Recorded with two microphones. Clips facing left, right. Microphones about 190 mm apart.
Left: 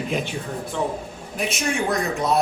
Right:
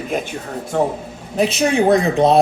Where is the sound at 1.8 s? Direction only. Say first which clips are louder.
Right 11 dB; 60° right (ahead or behind).